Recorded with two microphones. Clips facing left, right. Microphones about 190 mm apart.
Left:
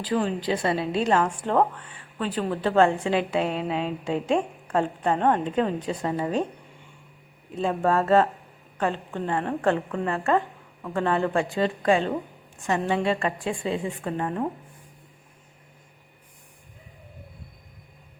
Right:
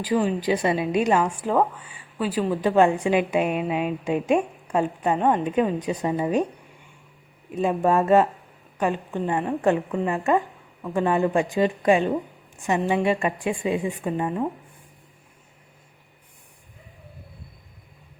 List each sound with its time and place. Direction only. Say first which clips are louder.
0.0 s a woman's voice: right 3 dB; 10° right (ahead or behind)
7.5 s a woman's voice: right 2 dB; 15° right (ahead or behind)